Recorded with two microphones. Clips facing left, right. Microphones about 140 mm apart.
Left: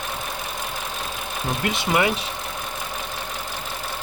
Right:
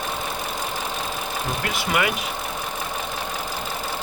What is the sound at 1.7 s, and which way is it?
Speech, 25° left (ahead or behind).